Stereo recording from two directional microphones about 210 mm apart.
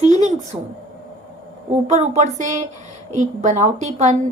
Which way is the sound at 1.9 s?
30° right (ahead or behind).